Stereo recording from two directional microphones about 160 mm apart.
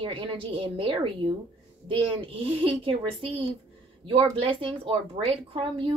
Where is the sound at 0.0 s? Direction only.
35° right (ahead or behind).